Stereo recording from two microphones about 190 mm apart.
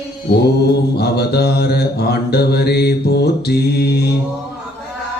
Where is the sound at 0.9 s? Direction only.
60° left (ahead or behind).